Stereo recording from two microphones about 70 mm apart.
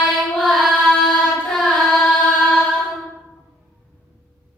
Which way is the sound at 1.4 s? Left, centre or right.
Centre.